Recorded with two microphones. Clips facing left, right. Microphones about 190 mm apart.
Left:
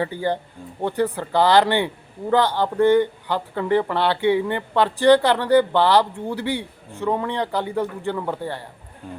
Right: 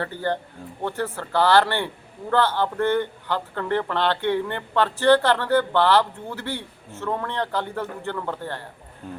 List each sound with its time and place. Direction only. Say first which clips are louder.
0.0 s speech: left 3 dB; 10° left (ahead or behind)